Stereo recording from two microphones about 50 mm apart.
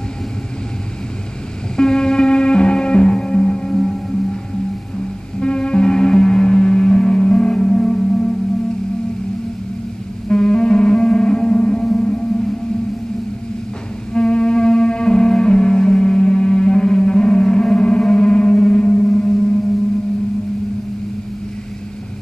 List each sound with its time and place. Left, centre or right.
1.8 s music: centre
5.4 s music: centre
10.2 s music: centre
14.1 s cello: centre